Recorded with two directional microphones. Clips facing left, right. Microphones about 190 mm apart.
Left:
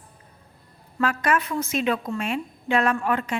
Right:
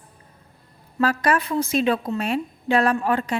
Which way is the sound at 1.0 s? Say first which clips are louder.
Right 3 dB; 35° right (ahead or behind).